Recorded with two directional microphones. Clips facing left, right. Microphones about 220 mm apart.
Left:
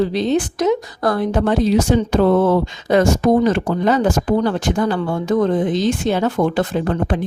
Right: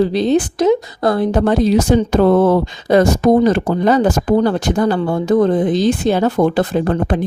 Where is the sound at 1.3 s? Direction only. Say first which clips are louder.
Right 2 dB; 40° right (ahead or behind).